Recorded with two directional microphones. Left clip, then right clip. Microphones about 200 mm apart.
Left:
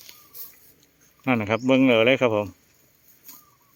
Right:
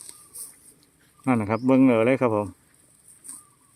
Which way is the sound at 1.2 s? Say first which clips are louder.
Left 1 dB; centre (ahead or behind).